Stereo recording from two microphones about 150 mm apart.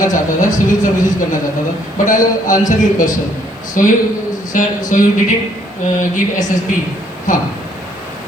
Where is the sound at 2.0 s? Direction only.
60° left (ahead or behind).